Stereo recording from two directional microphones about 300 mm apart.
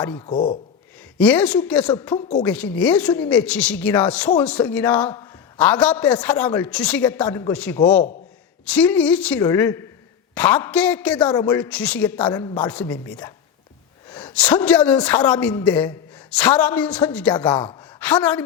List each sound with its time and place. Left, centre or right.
0.2 s speech: centre
1.2 s a man's voice: centre